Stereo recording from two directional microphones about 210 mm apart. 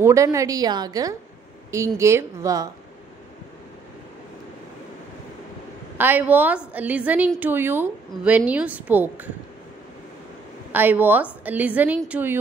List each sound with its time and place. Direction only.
0.0 s a woman's voice: 15° right (ahead or behind)
5.9 s a woman's voice: 10° right (ahead or behind)
10.7 s a woman's voice: 10° right (ahead or behind)